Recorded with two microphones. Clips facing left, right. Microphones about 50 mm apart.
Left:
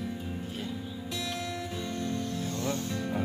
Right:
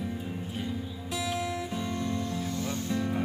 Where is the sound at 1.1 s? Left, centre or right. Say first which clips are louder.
Right 4 dB; centre.